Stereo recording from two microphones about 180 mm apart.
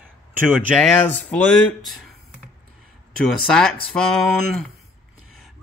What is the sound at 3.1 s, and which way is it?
Speech, 5° left (ahead or behind).